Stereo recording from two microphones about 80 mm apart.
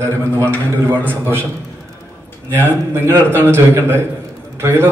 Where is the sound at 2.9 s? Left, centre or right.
Right.